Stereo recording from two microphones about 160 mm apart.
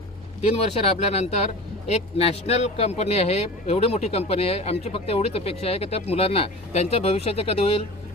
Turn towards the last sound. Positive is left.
turn(degrees=40)  # may be behind; listen again after turning